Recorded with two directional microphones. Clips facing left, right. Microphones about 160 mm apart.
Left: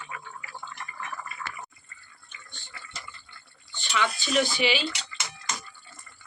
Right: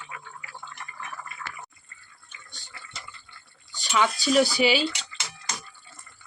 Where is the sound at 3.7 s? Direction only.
40° right (ahead or behind).